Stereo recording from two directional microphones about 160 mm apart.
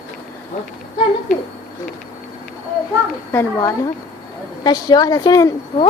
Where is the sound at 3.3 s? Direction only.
15° left (ahead or behind).